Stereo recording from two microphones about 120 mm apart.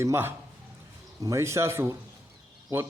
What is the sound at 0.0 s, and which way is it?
A man's voice, 20° right (ahead or behind).